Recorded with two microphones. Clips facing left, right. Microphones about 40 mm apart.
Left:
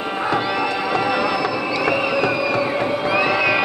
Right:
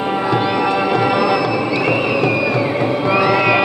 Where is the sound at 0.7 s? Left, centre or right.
Right.